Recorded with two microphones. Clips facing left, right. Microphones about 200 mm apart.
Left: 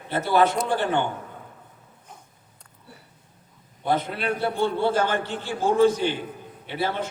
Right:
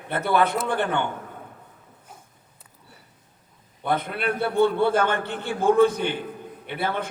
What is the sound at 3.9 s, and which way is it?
A man's voice, 55° right (ahead or behind).